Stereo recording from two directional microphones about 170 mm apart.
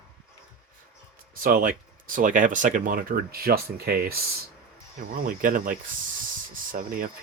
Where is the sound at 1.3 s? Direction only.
55° right (ahead or behind).